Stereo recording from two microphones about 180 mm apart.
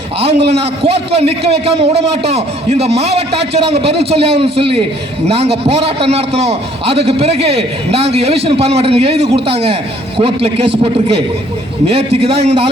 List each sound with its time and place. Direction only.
0.3 s a man's voice: 70° right (ahead or behind)
1.1 s a man's voice: 35° right (ahead or behind)
11.9 s a man's voice: 35° right (ahead or behind)